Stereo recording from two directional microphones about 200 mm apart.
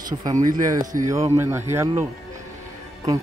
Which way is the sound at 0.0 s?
20° right (ahead or behind).